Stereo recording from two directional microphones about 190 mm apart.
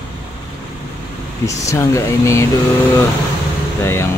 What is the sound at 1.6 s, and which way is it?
Speech, 15° left (ahead or behind).